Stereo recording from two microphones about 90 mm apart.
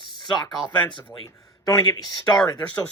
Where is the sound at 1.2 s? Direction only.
45° left (ahead or behind).